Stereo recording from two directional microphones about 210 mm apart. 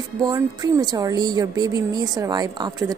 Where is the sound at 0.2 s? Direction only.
15° right (ahead or behind).